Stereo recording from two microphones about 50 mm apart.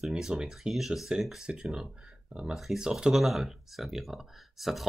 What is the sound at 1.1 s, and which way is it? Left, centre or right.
Speech, centre.